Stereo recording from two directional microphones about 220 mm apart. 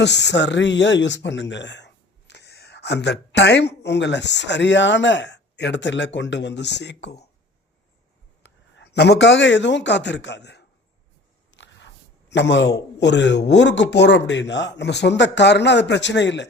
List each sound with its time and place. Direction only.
0.0 s speech: 50° left (ahead or behind)
8.4 s a man's voice: 55° left (ahead or behind)
11.5 s a sound: 55° left (ahead or behind)
12.3 s speech: 55° left (ahead or behind)